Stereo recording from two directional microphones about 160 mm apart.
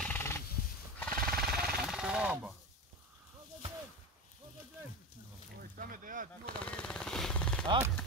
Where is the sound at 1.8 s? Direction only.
5° right (ahead or behind).